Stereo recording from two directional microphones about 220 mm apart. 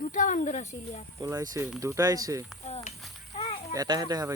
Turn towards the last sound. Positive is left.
turn(degrees=-15)  # may be behind; listen again after turning